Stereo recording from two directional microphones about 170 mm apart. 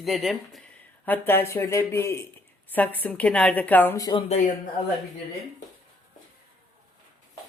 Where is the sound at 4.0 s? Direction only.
20° left (ahead or behind).